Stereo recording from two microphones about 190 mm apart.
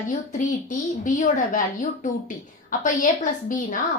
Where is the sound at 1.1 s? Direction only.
40° left (ahead or behind).